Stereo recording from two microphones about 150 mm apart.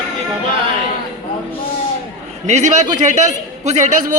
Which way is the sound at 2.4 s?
50° right (ahead or behind).